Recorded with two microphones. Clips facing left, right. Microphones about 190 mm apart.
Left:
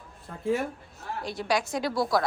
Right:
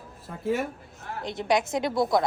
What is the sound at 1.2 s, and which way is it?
A woman's voice, 20° right (ahead or behind).